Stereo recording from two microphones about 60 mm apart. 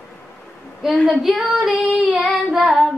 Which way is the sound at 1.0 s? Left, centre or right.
Centre.